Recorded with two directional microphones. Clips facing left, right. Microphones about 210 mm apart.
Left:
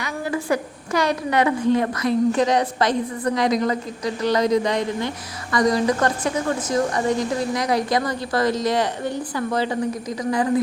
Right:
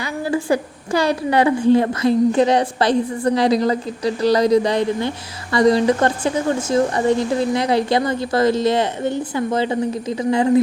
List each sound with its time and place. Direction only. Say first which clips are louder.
0.0 s a woman's voice: right 4 dB; 30° right (ahead or behind)